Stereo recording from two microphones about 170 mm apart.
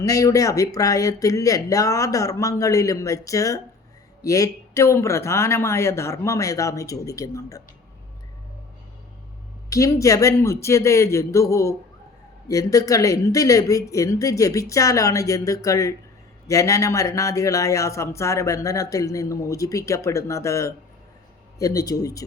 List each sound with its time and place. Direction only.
0.0 s a man's voice: 20° left (ahead or behind)
9.6 s a man's voice: 20° left (ahead or behind)